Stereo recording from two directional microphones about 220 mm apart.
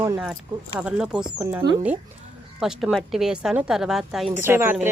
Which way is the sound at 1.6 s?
20° right (ahead or behind).